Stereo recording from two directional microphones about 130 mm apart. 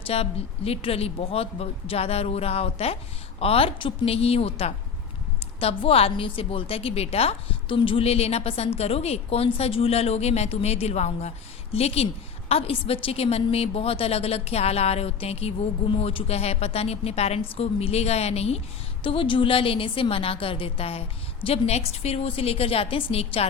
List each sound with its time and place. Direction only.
0.1 s a woman's voice: 50° left (ahead or behind)
19.0 s a woman's voice: 40° left (ahead or behind)